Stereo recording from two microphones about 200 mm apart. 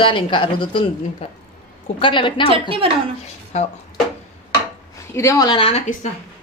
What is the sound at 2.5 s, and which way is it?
Speech, 25° right (ahead or behind).